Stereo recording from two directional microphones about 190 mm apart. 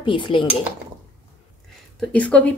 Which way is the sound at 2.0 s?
5° left (ahead or behind).